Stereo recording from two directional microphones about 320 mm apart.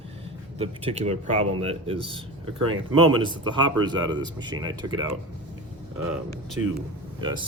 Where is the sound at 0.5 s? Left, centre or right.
Centre.